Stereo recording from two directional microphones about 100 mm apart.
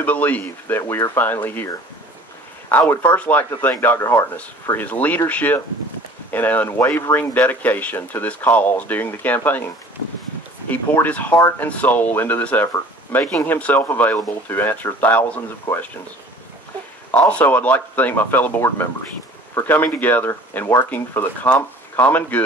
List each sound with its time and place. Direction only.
0.0 s speech: 15° left (ahead or behind)
2.9 s speech: 20° left (ahead or behind)
10.7 s speech: 15° left (ahead or behind)
17.1 s speech: 15° left (ahead or behind)